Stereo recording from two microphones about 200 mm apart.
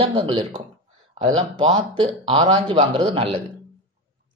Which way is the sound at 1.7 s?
25° right (ahead or behind).